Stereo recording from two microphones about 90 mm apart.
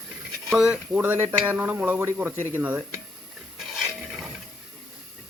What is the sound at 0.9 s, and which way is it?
Speech, 20° right (ahead or behind).